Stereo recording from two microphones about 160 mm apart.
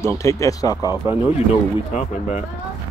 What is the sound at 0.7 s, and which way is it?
Speech, 15° right (ahead or behind).